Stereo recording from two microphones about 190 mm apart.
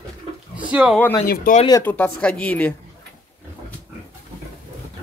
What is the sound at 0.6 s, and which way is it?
Speech, 5° right (ahead or behind).